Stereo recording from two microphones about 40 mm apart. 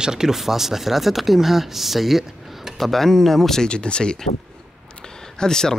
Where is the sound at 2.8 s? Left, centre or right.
Centre.